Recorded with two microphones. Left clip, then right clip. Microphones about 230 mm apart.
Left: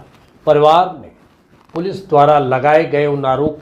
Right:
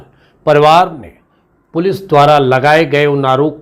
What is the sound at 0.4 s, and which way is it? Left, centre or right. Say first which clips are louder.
Speech: right 3 dB; right.